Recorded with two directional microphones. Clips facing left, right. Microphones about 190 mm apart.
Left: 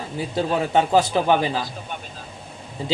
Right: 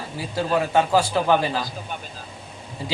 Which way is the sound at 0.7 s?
20° left (ahead or behind).